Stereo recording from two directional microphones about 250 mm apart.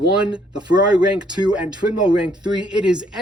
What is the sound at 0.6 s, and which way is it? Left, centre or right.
Speech, centre.